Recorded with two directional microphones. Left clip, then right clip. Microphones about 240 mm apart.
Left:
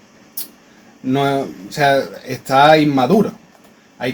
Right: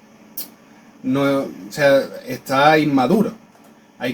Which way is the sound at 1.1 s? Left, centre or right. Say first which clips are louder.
Left 2 dB; left.